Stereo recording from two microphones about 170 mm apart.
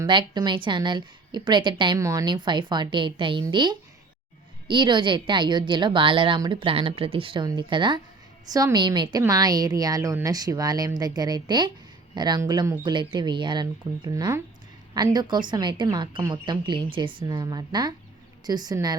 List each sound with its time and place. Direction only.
0.0 s a woman's voice: 25° right (ahead or behind)